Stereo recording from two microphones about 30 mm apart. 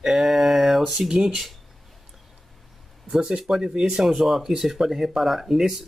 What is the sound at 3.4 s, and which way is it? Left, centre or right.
Speech, centre.